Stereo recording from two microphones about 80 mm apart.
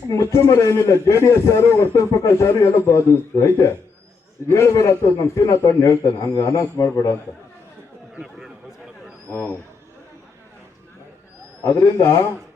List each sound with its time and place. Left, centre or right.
0.1 s a man's voice: left
9.3 s speech: left
11.7 s a man's voice: left